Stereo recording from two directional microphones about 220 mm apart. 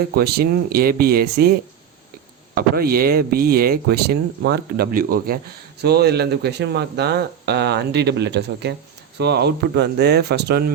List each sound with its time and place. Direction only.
0.1 s speech: 45° right (ahead or behind)
2.6 s speech: 45° right (ahead or behind)